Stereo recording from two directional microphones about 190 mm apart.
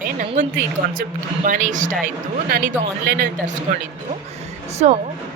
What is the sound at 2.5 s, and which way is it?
Speech, 55° right (ahead or behind).